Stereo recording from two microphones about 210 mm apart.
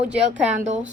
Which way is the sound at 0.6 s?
35° right (ahead or behind).